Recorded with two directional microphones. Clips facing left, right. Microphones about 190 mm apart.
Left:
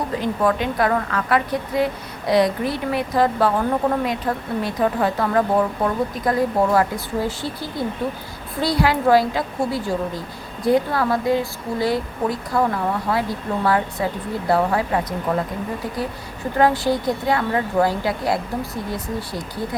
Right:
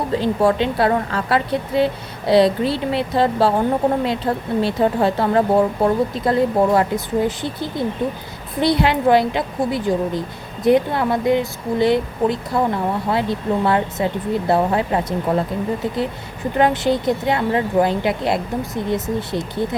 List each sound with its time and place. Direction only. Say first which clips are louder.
0.2 s a woman's voice: right 3 dB; 30° right (ahead or behind)
16.6 s a woman's voice: right 1 dB; 20° right (ahead or behind)